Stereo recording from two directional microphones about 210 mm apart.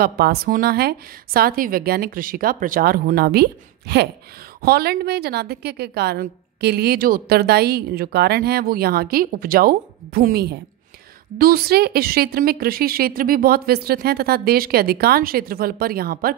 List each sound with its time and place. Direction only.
0.0 s a woman's voice: 50° right (ahead or behind)